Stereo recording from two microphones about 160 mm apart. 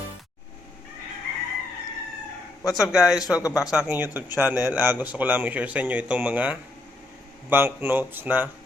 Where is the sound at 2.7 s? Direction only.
5° right (ahead or behind).